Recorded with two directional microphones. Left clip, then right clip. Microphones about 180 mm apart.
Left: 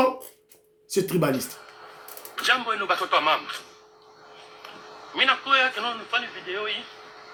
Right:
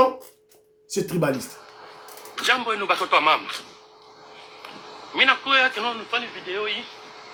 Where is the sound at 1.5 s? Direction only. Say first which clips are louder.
Right 1 dB; 30° right (ahead or behind).